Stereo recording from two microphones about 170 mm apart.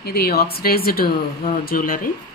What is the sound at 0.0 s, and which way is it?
Speech, 65° left (ahead or behind).